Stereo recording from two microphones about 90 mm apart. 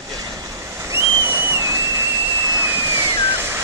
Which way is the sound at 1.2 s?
20° right (ahead or behind).